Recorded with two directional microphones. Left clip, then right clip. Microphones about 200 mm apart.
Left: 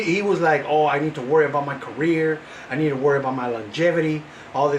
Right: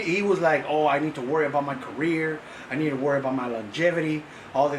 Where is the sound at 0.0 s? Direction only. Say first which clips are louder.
Left 3 dB; 10° left (ahead or behind).